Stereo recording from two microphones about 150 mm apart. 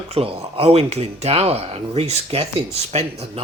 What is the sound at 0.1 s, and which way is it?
Speech, 40° right (ahead or behind).